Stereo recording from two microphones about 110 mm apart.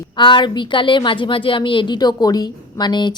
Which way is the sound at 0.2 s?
45° left (ahead or behind).